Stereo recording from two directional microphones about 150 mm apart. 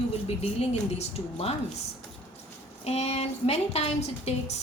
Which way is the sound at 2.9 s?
45° left (ahead or behind).